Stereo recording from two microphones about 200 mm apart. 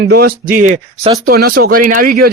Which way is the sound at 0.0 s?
50° right (ahead or behind).